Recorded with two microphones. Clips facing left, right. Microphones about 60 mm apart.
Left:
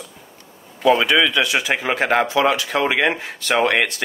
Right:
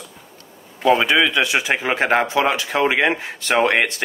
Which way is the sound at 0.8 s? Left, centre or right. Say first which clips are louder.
Even; centre.